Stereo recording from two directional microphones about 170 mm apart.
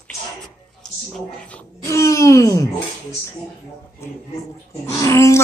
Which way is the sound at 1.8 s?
20° left (ahead or behind).